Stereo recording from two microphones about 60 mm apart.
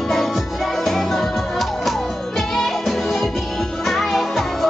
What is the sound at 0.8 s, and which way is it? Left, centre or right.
Music, centre.